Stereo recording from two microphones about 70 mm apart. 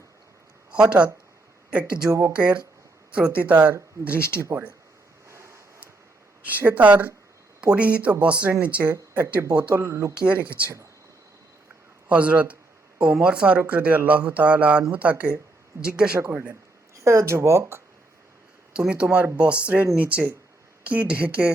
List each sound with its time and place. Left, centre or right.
0.7 s a man's voice: centre
2.0 s speech: right
2.3 s a man's voice: centre
5.3 s a sound: right
6.4 s a man's voice: right
9.8 s speech: right
10.2 s a man's voice: centre
12.0 s a man's voice: centre
16.1 s a man's voice: right
16.9 s speech: right
18.9 s a man's voice: centre